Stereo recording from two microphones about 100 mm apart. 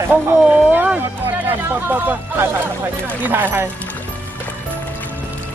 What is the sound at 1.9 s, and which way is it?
Speech, 20° right (ahead or behind).